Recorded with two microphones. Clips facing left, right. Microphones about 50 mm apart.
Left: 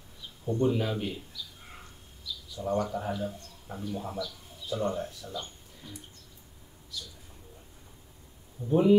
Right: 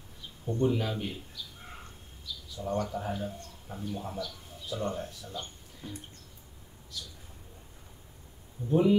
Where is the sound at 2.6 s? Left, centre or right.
Left.